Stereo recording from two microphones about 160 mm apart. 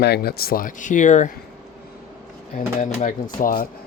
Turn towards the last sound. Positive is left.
turn(degrees=60)  # may be behind; listen again after turning